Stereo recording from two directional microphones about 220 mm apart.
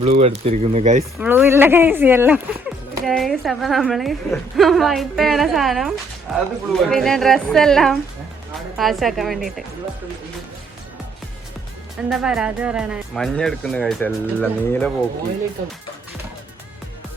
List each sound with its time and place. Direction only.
0.1 s speech: 30° right (ahead or behind)
1.2 s speech: 10° right (ahead or behind)
12.0 s speech: centre (ahead or behind)